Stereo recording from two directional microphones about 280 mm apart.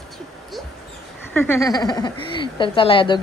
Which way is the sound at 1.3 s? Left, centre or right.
Centre.